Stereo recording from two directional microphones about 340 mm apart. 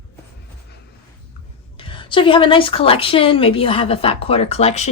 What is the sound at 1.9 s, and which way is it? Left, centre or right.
A woman's voice, centre.